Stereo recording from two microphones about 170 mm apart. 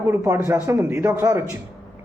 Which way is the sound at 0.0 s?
15° right (ahead or behind).